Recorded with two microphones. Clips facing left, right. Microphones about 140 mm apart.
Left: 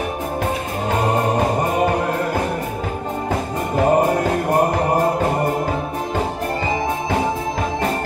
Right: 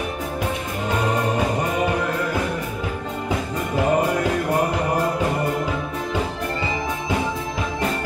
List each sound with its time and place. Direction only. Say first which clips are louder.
0.8 s music: left 3 dB; 40° left (ahead or behind)